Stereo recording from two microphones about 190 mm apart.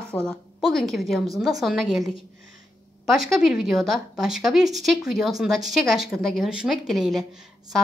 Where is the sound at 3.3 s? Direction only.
Centre (ahead or behind).